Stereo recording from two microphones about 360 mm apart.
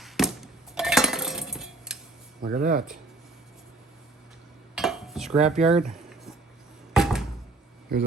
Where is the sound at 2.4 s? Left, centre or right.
Right.